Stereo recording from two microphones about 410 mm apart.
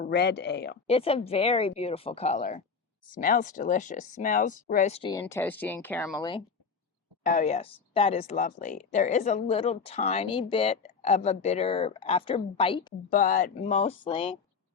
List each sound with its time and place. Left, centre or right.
0.0 s speech: left